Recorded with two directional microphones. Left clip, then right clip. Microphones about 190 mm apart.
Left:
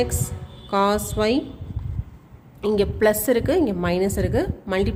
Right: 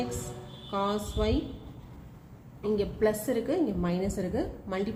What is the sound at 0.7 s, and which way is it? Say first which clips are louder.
Speech: left 10 dB; 60° left (ahead or behind).